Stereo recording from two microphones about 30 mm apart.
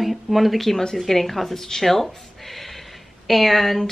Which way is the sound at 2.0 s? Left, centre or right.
Centre.